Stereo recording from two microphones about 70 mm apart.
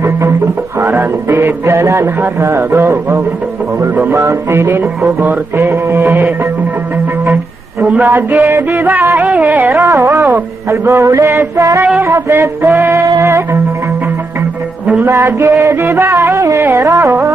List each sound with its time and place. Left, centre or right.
0.7 s music: right
1.7 s music: right
7.8 s a man's voice: right
9.7 s mantra: right
12.0 s a sound: right
13.2 s music: right
15.0 s music: right